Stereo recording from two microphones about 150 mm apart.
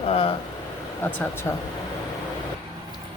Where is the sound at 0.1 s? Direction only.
40° left (ahead or behind).